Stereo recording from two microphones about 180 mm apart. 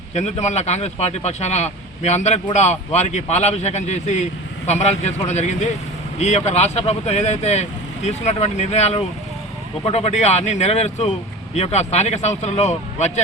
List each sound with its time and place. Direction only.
0.1 s speech: 40° left (ahead or behind)